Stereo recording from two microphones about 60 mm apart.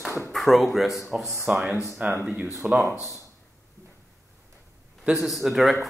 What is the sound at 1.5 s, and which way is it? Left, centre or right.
Speech, right.